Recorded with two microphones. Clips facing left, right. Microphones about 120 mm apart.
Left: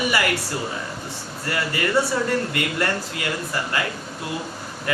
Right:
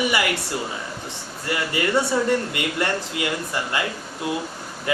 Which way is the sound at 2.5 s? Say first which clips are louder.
Even; 20° right (ahead or behind).